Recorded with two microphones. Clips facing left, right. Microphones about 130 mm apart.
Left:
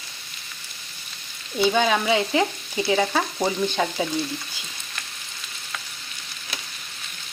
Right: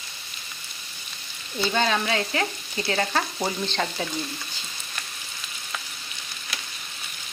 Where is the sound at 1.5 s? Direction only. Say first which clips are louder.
Left 4 dB; 10° left (ahead or behind).